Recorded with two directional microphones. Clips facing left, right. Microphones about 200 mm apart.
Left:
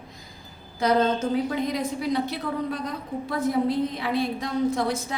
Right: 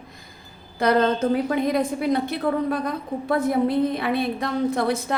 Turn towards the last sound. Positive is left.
turn(degrees=-60)  # may be behind; listen again after turning